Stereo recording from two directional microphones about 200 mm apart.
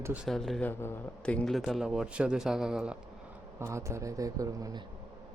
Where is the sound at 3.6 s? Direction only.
15° right (ahead or behind).